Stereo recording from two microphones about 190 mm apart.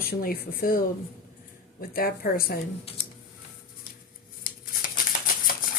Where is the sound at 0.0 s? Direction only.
50° left (ahead or behind).